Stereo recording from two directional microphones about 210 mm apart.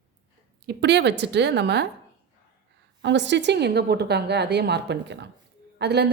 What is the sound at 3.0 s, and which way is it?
A woman's voice, 60° right (ahead or behind).